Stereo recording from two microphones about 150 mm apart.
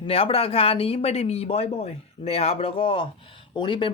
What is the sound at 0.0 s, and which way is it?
Speech, 40° left (ahead or behind).